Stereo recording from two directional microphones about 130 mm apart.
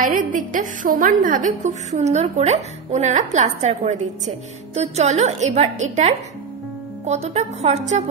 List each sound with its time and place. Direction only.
0.1 s a woman's voice: 90° right; by 8.0 s 60° right (ahead or behind)